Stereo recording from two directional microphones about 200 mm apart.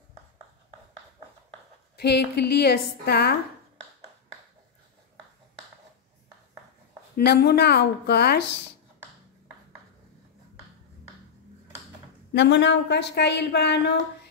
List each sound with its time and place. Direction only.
2.0 s a woman's voice: 55° left (ahead or behind)
7.2 s a woman's voice: 50° left (ahead or behind)
12.3 s a woman's voice: 60° left (ahead or behind)